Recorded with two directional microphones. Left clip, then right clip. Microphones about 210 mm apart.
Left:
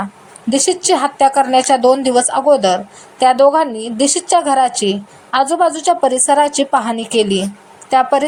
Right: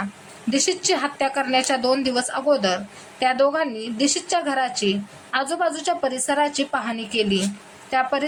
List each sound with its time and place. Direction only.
0.5 s speech: 15° left (ahead or behind)